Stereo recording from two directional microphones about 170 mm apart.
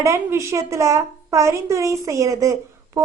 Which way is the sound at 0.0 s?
15° right (ahead or behind).